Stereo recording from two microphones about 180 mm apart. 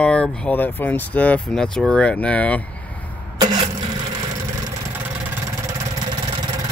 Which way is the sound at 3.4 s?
25° right (ahead or behind).